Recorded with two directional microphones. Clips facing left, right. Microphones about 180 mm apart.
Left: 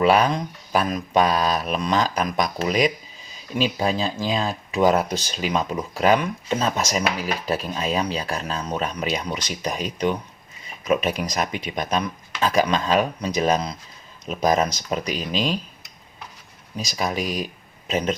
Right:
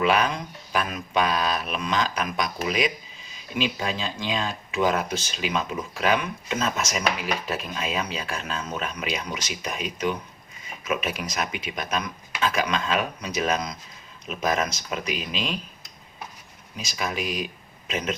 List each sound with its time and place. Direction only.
0.0 s speech: 35° left (ahead or behind)
16.7 s speech: 35° left (ahead or behind)